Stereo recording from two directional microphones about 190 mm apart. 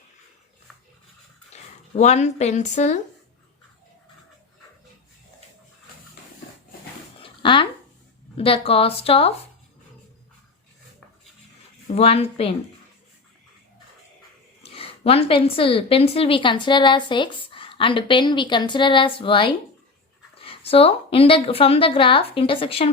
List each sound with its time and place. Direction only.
1.5 s speech: 35° left (ahead or behind)
7.2 s a sound: 25° left (ahead or behind)
8.4 s a woman's voice: 30° left (ahead or behind)
11.9 s a woman's voice: 30° left (ahead or behind)
14.7 s a woman's voice: 30° left (ahead or behind)